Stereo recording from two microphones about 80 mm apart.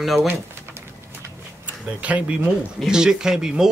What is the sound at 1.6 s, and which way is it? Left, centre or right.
Speech, centre.